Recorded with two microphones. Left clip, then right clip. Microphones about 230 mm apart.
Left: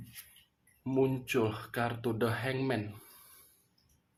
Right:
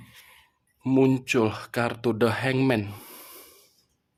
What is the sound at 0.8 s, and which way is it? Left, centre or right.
Speech, right.